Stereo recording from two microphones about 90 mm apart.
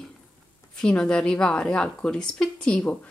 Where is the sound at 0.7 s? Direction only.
10° left (ahead or behind).